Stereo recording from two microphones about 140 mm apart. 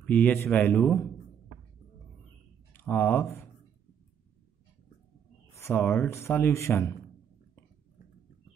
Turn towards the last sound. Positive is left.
turn(degrees=20)  # may be behind; listen again after turning